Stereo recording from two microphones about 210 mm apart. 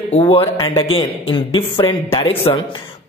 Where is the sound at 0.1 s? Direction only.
25° left (ahead or behind).